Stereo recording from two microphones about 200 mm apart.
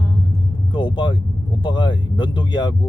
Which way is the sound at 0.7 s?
25° left (ahead or behind).